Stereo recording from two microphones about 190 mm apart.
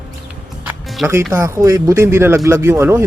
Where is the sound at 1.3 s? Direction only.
15° right (ahead or behind).